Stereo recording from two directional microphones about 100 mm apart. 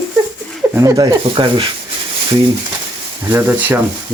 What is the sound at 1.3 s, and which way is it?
Speech, 60° right (ahead or behind).